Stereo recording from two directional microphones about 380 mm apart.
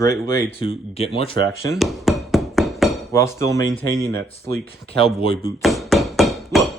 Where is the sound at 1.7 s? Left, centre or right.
Centre.